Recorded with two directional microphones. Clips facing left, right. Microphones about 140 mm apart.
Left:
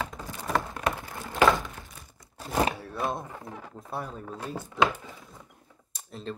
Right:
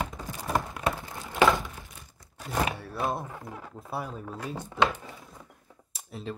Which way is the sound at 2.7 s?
Centre (ahead or behind).